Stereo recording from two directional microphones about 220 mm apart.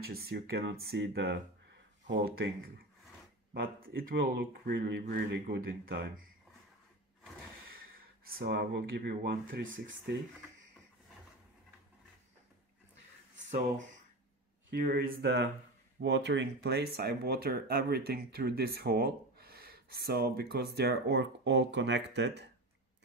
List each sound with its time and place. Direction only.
0.3 s speech: 45° right (ahead or behind)
8.3 s speech: 45° right (ahead or behind)
14.7 s speech: 45° right (ahead or behind)